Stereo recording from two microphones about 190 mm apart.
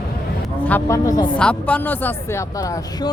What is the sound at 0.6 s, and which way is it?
Speech, 10° left (ahead or behind).